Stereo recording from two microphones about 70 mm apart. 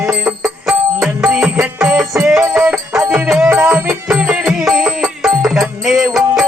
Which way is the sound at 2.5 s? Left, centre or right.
Right.